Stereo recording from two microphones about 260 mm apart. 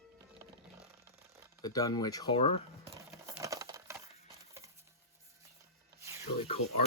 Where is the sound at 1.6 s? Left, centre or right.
Centre.